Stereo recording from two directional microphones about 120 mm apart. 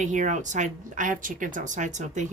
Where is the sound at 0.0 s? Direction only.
90° right.